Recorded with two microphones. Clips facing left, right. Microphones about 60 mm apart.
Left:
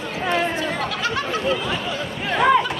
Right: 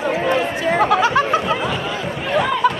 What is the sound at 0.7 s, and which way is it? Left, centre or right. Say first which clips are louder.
Chatter: right 9 dB; right.